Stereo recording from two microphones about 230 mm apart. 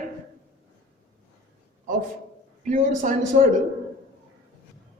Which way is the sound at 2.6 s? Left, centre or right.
Right.